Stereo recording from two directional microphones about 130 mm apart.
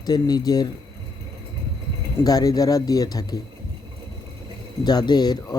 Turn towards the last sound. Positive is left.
turn(degrees=30)  # may be behind; listen again after turning